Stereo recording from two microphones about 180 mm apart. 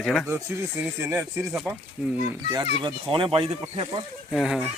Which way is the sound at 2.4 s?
20° right (ahead or behind).